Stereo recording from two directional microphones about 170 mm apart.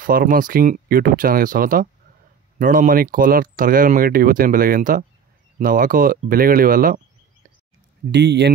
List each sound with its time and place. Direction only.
0.0 s speech: 60° right (ahead or behind)
8.1 s speech: 90° right